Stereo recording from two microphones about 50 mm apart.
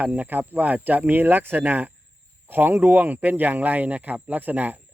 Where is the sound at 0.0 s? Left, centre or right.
Right.